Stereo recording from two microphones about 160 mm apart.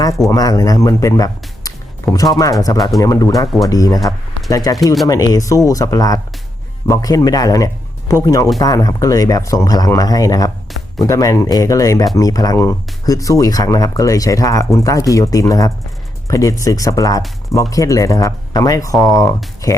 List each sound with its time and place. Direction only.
0.3 s a man's voice: 20° left (ahead or behind)